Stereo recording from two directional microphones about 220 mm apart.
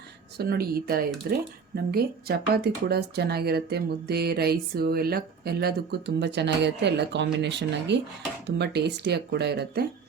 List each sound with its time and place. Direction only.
0.3 s speech: 45° right (ahead or behind)